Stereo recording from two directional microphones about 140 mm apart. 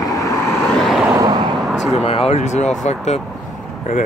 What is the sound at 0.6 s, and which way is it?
Vehicle, 5° left (ahead or behind).